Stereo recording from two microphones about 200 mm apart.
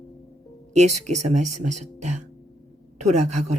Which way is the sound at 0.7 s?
35° right (ahead or behind).